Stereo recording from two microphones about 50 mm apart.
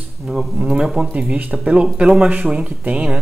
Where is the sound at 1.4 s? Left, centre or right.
Right.